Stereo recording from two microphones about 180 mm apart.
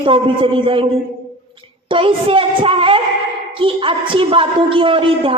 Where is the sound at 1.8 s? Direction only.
30° right (ahead or behind).